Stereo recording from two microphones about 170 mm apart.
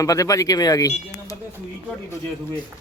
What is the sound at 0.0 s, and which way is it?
Speech, 20° left (ahead or behind).